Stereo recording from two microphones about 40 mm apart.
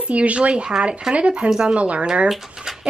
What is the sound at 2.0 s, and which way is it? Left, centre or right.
Speech, right.